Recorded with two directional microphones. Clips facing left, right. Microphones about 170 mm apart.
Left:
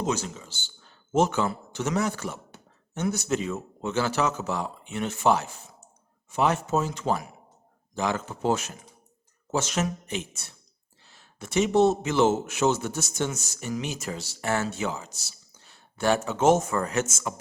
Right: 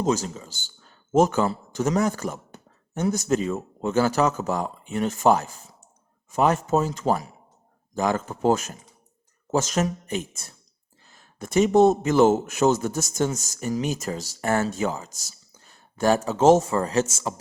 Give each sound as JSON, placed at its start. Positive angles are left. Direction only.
{"t": 0.0, "sound": "a man's voice", "side_deg": -40}